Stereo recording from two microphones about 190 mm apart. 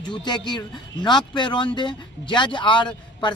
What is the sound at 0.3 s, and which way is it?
Speech, 25° left (ahead or behind).